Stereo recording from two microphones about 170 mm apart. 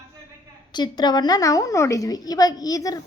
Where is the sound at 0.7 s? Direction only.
25° left (ahead or behind).